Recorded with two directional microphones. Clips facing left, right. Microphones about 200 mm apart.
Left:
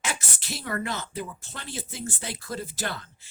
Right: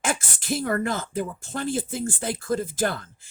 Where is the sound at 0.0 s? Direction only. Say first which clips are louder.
Right 6 dB; 50° right (ahead or behind).